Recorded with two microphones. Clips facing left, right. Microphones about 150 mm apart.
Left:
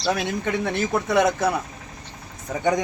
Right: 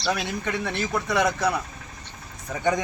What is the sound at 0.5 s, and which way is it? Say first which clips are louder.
Speech: left 5 dB; 50° left (ahead or behind).